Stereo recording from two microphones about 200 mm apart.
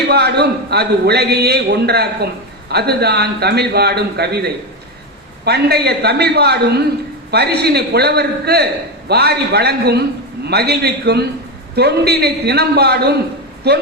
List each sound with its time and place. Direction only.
0.1 s a man's voice: 55° right (ahead or behind)